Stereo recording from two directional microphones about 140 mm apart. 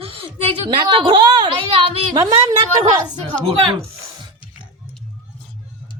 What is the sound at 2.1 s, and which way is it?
Speech, 25° right (ahead or behind).